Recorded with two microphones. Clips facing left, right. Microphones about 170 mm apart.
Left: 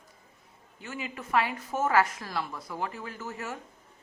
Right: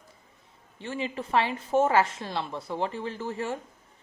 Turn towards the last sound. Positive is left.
turn(degrees=-30)  # may be behind; listen again after turning